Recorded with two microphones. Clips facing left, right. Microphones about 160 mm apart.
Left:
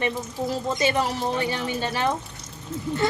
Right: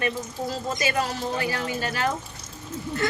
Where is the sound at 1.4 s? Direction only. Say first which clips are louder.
Left 1 dB; 25° left (ahead or behind).